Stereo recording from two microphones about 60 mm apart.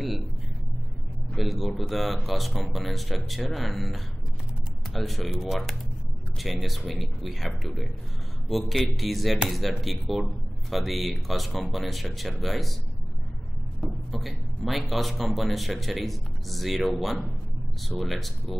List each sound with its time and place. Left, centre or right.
1.3 s speech: centre
13.7 s speech: centre